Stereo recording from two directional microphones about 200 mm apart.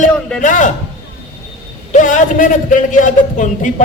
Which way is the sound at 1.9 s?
40° left (ahead or behind).